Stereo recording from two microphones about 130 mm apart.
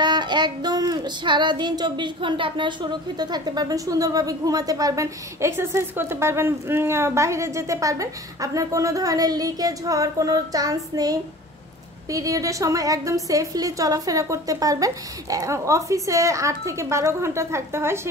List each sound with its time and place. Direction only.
0.0 s child singing: 35° right (ahead or behind); by 18.0 s 20° right (ahead or behind)